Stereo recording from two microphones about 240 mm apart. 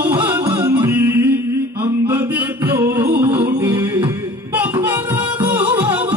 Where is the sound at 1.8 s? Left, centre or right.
Centre.